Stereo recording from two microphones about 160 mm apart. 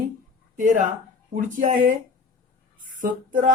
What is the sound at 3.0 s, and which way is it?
Music, 55° right (ahead or behind).